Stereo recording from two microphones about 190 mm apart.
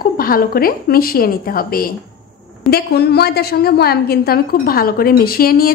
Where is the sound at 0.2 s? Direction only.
50° left (ahead or behind).